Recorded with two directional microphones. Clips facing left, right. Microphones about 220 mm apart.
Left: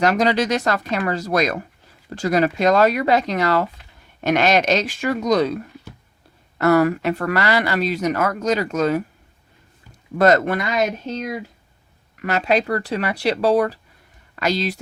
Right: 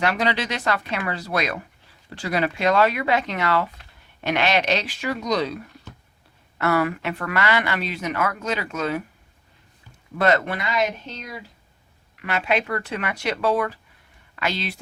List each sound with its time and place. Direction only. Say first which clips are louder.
0.0 s speech: left 6 dB; 40° left (ahead or behind)
6.6 s speech: left 6 dB; 40° left (ahead or behind)
10.2 s speech: left 5 dB; 45° left (ahead or behind)